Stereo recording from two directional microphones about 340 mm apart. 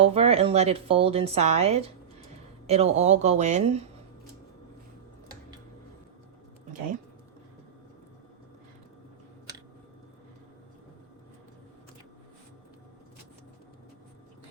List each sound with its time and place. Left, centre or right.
0.0 s speech: centre